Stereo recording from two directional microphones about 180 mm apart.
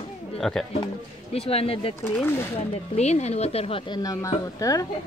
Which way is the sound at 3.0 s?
40° left (ahead or behind).